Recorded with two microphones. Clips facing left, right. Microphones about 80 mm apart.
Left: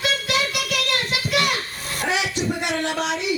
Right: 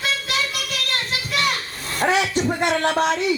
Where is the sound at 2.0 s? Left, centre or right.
Right.